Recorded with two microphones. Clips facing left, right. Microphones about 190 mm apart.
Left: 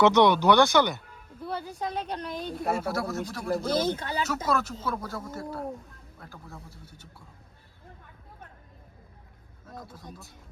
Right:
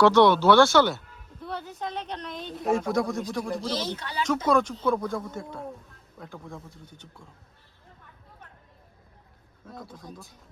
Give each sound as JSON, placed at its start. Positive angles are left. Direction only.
{"t": 0.0, "sound": "speech", "side_deg": 20}
{"t": 1.4, "sound": "a woman's voice", "side_deg": 0}
{"t": 3.7, "sound": "speech", "side_deg": 50}
{"t": 4.2, "sound": "a woman's voice", "side_deg": 5}
{"t": 9.7, "sound": "a woman's voice", "side_deg": 0}